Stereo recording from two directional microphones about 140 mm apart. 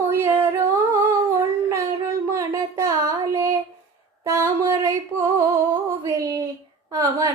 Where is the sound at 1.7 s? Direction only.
20° right (ahead or behind).